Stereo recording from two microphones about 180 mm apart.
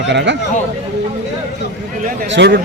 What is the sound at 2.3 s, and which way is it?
Speech, 80° right.